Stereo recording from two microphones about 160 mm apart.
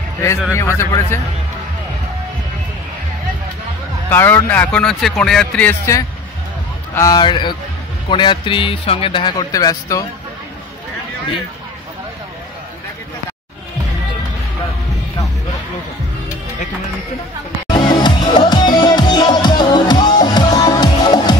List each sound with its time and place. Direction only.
0.5 s speech: 15° left (ahead or behind)
4.1 s speech: 15° left (ahead or behind)
17.6 s music: 25° left (ahead or behind)